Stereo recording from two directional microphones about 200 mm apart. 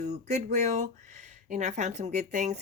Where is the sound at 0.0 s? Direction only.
35° right (ahead or behind).